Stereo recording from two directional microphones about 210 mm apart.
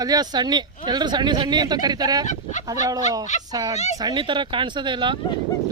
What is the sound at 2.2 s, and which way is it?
Speech, 35° left (ahead or behind).